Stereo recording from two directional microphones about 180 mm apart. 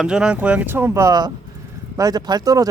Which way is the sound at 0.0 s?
5° right (ahead or behind).